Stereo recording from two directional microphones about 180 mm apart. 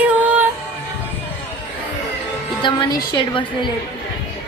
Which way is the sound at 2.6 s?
25° left (ahead or behind).